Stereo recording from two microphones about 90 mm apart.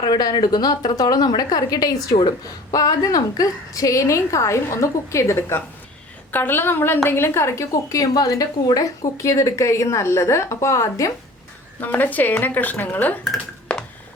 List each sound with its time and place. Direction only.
0.0 s a woman's voice: 50° left (ahead or behind)
11.8 s a woman's voice: 20° left (ahead or behind)